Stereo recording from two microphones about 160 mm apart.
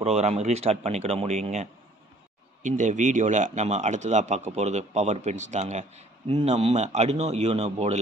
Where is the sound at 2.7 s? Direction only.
50° right (ahead or behind).